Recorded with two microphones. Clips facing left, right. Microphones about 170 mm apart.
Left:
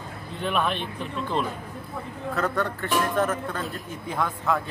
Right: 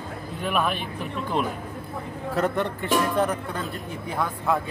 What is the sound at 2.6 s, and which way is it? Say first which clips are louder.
Speech: right 2 dB; 15° right (ahead or behind).